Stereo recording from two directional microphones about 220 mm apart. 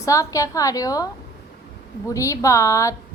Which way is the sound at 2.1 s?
15° left (ahead or behind).